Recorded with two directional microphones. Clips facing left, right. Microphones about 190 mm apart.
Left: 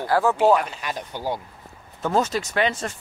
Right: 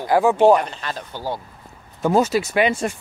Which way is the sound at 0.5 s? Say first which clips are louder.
Right 3 dB; 5° left (ahead or behind).